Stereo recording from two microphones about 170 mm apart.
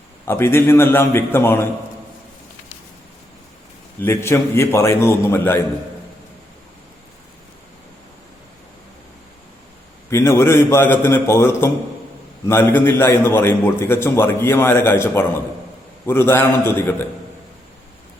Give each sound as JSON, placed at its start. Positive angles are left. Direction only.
{"t": 0.3, "sound": "a man's voice", "side_deg": 15}
{"t": 4.0, "sound": "a man's voice", "side_deg": 15}
{"t": 10.1, "sound": "a man's voice", "side_deg": 15}